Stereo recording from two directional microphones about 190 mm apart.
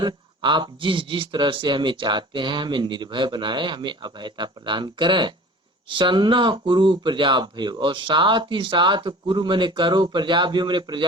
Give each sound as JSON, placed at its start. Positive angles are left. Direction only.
{"t": 0.0, "sound": "a man's voice", "side_deg": -25}